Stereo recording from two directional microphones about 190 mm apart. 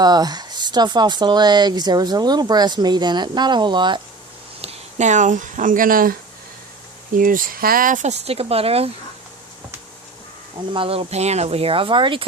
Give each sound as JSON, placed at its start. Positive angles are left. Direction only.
{"t": 0.0, "sound": "speech", "side_deg": -20}
{"t": 4.6, "sound": "speech", "side_deg": -35}
{"t": 7.2, "sound": "speech", "side_deg": -45}
{"t": 10.8, "sound": "speech", "side_deg": -30}